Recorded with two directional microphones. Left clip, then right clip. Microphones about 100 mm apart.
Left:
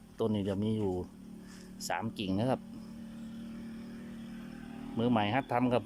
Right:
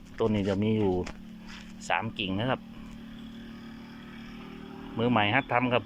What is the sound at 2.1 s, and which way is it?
Speech, 40° left (ahead or behind).